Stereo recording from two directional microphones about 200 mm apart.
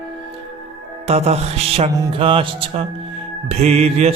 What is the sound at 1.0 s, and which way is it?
Music, 30° right (ahead or behind).